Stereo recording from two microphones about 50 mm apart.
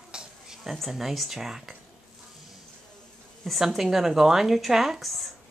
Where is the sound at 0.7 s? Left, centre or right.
Centre.